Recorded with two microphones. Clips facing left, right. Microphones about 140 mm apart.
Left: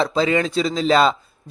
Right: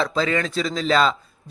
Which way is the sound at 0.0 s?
30° left (ahead or behind).